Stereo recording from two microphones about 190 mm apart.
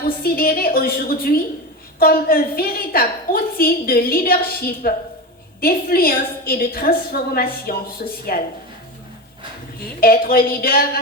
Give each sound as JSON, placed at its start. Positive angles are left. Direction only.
{"t": 0.0, "sound": "a woman's voice", "side_deg": 50}
{"t": 10.0, "sound": "a woman's voice", "side_deg": 50}